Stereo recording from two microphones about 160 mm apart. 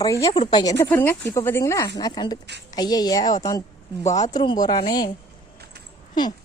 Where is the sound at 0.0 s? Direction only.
20° left (ahead or behind).